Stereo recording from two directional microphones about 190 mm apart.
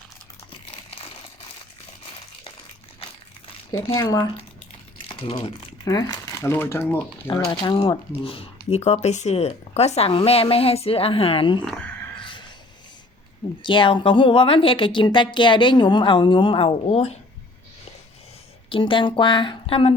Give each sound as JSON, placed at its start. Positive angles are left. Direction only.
{"t": 0.7, "sound": "a sound", "side_deg": 30}
{"t": 3.7, "sound": "a woman's voice", "side_deg": 25}
{"t": 7.5, "sound": "speech", "side_deg": 25}
{"t": 11.6, "sound": "speech", "side_deg": 5}
{"t": 12.2, "sound": "a sound", "side_deg": 25}
{"t": 13.6, "sound": "a woman's voice", "side_deg": 25}
{"t": 18.7, "sound": "a woman's voice", "side_deg": 25}